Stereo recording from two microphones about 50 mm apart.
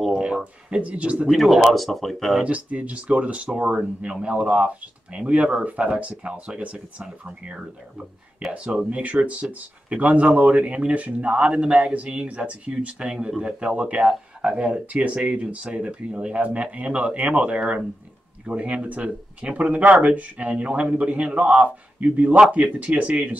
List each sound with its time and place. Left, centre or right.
0.7 s speech: right
1.3 s speech: centre
2.4 s speech: right